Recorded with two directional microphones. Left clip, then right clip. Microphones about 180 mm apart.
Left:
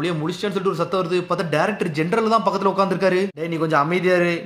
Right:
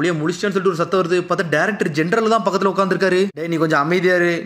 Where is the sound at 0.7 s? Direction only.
15° right (ahead or behind).